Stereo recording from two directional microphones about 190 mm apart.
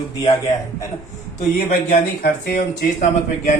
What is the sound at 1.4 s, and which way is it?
Speech, 40° left (ahead or behind).